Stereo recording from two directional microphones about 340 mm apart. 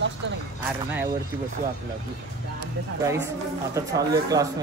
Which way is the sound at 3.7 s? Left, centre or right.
Centre.